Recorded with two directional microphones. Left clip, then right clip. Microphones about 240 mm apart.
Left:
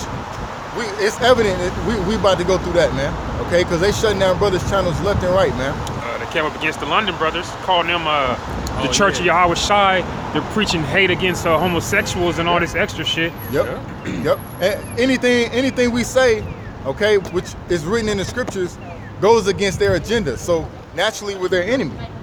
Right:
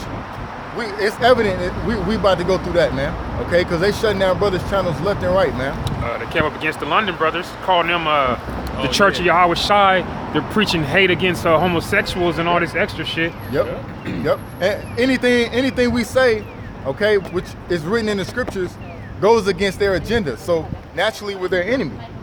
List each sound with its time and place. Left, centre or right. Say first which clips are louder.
0.8 s speech: even; centre
6.1 s speech: right 1 dB; centre